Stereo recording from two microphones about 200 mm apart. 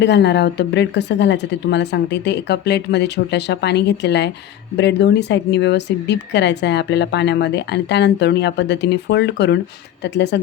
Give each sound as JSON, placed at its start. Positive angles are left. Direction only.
{"t": 0.0, "sound": "speech", "side_deg": 60}